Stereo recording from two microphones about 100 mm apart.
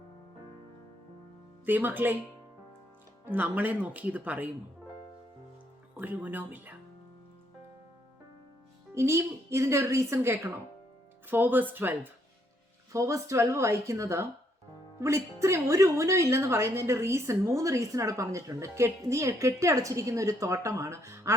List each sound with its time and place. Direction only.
1.6 s a woman's voice: 20° right (ahead or behind)
3.2 s speech: 15° right (ahead or behind)
6.0 s speech: 15° right (ahead or behind)
9.0 s a woman's voice: 25° right (ahead or behind)
12.9 s a woman's voice: 30° right (ahead or behind)